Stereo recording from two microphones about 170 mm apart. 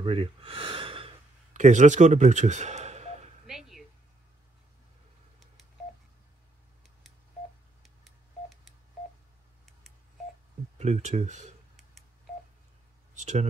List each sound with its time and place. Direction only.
0.0 s speech: 30° right (ahead or behind)
1.5 s speech: 45° right (ahead or behind)
3.4 s a sound: centre (ahead or behind)
10.8 s speech: 40° right (ahead or behind)
13.1 s speech: 45° right (ahead or behind)